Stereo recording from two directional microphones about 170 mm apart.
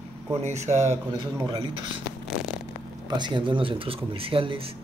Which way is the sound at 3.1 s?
25° right (ahead or behind).